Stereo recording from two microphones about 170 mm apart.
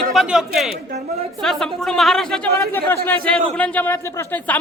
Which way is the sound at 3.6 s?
10° left (ahead or behind).